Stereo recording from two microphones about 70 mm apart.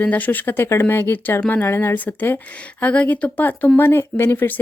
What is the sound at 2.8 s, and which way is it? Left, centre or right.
Speech, left.